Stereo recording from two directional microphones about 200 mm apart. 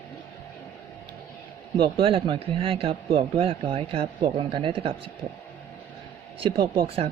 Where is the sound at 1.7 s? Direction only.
25° right (ahead or behind).